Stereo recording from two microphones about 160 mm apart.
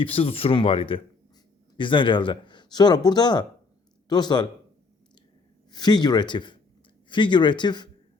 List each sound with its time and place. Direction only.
0.0 s speech: 35° left (ahead or behind)
5.7 s speech: 25° left (ahead or behind)